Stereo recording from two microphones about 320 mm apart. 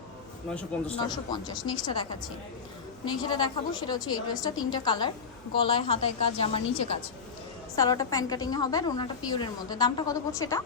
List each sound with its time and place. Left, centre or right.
0.9 s a woman's voice: centre
3.2 s a woman's voice: centre